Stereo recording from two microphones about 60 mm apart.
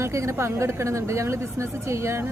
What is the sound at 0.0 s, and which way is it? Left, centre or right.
A woman's voice, right.